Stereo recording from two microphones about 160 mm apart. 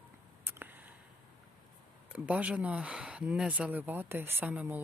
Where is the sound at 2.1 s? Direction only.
10° right (ahead or behind).